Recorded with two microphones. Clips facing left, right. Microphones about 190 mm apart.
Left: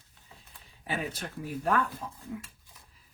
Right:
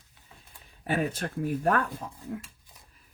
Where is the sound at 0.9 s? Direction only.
50° right (ahead or behind).